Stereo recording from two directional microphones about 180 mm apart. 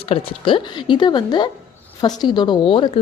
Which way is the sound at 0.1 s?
30° left (ahead or behind).